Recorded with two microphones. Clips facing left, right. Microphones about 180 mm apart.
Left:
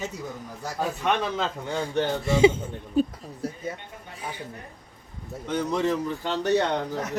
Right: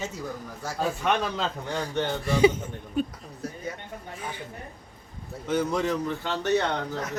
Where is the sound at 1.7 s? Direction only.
25° left (ahead or behind).